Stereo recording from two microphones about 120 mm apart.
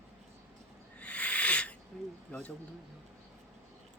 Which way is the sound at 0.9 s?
10° left (ahead or behind).